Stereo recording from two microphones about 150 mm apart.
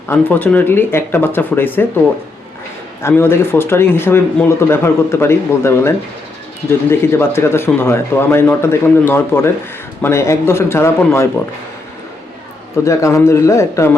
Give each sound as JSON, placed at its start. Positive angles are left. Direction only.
{"t": 0.1, "sound": "speech", "side_deg": 10}
{"t": 3.0, "sound": "speech", "side_deg": 15}
{"t": 12.8, "sound": "a man's voice", "side_deg": 20}